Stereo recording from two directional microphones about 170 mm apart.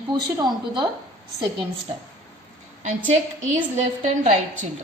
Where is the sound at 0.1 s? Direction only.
25° right (ahead or behind).